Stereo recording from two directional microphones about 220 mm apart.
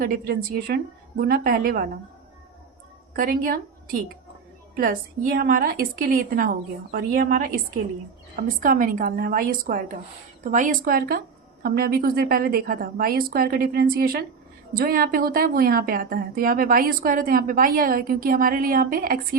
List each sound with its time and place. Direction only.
0.0 s a woman's voice: 40° right (ahead or behind)
3.2 s a woman's voice: 40° right (ahead or behind)
4.8 s a woman's voice: 40° right (ahead or behind)